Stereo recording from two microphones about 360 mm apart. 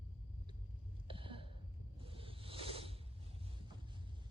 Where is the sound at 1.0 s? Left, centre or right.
Centre.